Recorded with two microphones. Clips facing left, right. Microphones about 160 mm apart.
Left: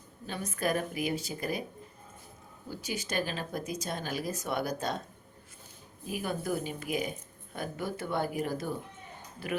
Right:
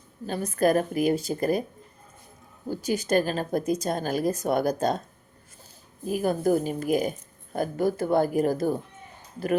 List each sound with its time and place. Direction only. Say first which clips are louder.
0.3 s speech: right 9 dB; 40° right (ahead or behind)
2.6 s speech: right 11 dB; 45° right (ahead or behind)
6.1 s a woman's voice: right 10 dB; 45° right (ahead or behind)